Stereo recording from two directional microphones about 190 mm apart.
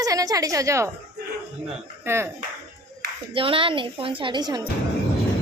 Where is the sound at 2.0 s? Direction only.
15° right (ahead or behind).